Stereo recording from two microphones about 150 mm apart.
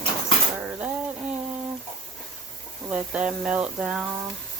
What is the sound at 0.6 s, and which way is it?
Dishes, 10° right (ahead or behind).